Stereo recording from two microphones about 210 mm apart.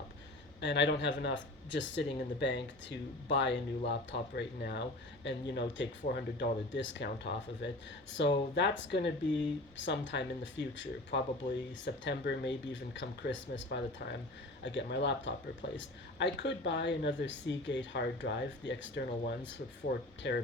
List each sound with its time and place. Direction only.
0.6 s speech: 55° left (ahead or behind)
14.6 s speech: 55° left (ahead or behind)